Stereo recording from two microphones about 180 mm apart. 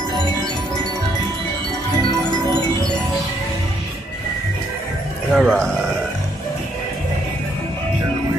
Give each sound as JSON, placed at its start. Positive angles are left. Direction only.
{"t": 5.3, "sound": "speech", "side_deg": 0}